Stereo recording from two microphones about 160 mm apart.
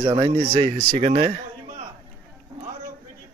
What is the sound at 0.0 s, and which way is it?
Speech, 30° right (ahead or behind).